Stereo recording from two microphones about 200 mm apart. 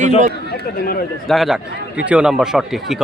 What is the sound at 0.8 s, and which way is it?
Speech, 45° left (ahead or behind).